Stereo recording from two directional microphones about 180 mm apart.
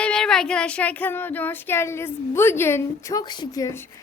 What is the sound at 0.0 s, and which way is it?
Child singing, 5° left (ahead or behind).